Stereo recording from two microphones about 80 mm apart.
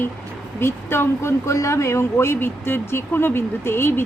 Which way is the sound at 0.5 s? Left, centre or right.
Left.